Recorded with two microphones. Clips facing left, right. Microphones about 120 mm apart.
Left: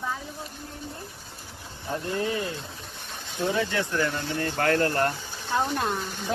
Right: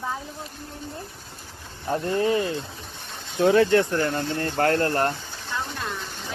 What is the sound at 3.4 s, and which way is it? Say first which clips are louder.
Speech: right 9 dB; 65° right (ahead or behind).